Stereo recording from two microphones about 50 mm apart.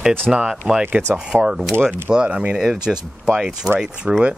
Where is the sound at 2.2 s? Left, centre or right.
Right.